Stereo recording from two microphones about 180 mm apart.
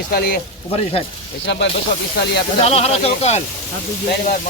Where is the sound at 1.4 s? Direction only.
80° left.